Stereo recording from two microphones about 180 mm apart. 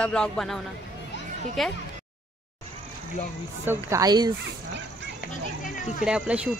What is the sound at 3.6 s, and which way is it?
Speech, 15° right (ahead or behind).